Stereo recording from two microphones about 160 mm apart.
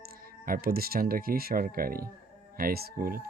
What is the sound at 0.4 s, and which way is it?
Speech, 65° right (ahead or behind).